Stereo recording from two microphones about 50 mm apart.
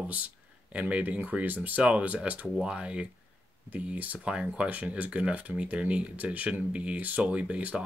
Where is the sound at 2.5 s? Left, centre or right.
Centre.